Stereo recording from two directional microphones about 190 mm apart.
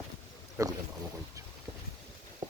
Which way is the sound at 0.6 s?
15° right (ahead or behind).